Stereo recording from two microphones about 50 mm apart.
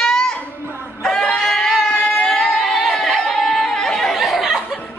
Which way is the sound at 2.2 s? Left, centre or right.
Centre.